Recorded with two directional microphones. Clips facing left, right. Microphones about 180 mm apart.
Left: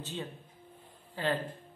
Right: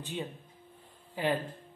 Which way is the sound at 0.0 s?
15° right (ahead or behind).